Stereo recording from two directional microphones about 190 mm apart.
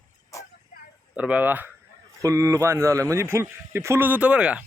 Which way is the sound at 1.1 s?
5° right (ahead or behind).